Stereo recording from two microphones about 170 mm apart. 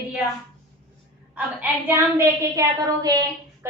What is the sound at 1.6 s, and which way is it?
A woman's voice, 15° right (ahead or behind).